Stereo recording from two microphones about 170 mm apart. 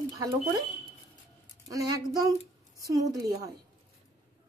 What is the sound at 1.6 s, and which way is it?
Speech, 20° right (ahead or behind).